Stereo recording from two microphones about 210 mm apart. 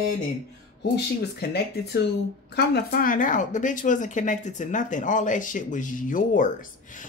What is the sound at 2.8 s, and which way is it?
Speech, 40° left (ahead or behind).